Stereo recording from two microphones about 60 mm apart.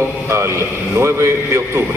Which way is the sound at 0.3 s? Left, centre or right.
Right.